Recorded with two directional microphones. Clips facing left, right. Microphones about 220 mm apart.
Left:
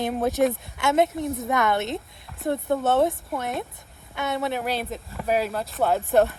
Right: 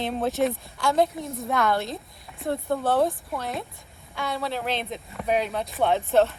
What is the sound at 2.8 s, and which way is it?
Speech, 25° left (ahead or behind).